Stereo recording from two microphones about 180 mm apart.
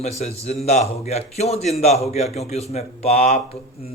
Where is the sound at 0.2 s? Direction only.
35° left (ahead or behind).